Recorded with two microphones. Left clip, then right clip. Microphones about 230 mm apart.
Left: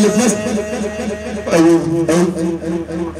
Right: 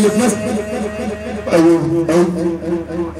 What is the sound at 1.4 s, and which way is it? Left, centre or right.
Music, left.